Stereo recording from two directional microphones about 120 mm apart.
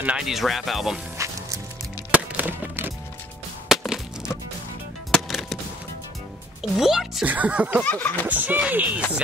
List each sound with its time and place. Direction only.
0.0 s speech: 5° right (ahead or behind)
1.1 s music: 25° right (ahead or behind)
2.0 s music: 10° right (ahead or behind)
3.6 s wood: 5° right (ahead or behind)
5.1 s music: centre (ahead or behind)
6.8 s speech: 5° right (ahead or behind)
7.8 s snicker: 15° left (ahead or behind)
8.3 s speech: 15° right (ahead or behind)